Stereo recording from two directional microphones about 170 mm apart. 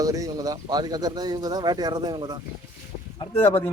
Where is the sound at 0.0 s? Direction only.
20° right (ahead or behind).